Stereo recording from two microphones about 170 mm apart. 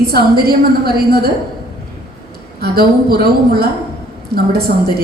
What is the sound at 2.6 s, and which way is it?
A woman's voice, 65° right (ahead or behind).